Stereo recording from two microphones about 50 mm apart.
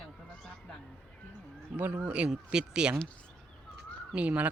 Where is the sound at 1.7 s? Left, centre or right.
Right.